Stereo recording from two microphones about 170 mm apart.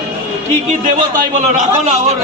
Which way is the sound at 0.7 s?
45° right (ahead or behind).